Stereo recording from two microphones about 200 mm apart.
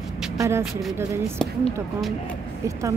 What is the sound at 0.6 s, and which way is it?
Speech, centre (ahead or behind).